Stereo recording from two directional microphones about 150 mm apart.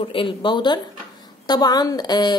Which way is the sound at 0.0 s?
35° left (ahead or behind).